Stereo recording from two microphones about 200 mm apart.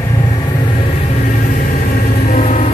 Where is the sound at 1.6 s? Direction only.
45° left (ahead or behind).